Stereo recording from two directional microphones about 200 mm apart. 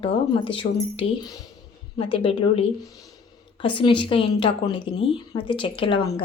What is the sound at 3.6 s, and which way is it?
A woman's voice, 25° left (ahead or behind).